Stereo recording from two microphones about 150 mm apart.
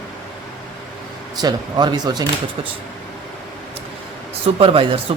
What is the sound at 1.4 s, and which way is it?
Speech, 25° right (ahead or behind).